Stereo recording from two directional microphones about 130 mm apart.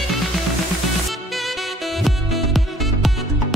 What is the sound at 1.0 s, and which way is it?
Music, centre (ahead or behind).